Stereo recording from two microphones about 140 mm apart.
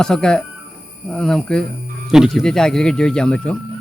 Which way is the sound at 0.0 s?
5° left (ahead or behind).